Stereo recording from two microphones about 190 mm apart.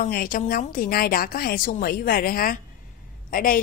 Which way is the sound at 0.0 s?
50° left (ahead or behind).